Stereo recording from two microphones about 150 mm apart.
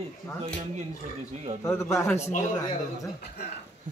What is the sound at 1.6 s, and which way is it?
Speech, 20° left (ahead or behind).